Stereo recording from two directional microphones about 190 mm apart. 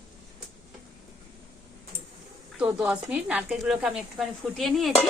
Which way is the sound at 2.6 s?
5° right (ahead or behind).